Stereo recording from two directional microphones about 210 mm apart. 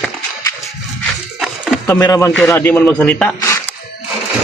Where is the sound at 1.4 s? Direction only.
5° right (ahead or behind).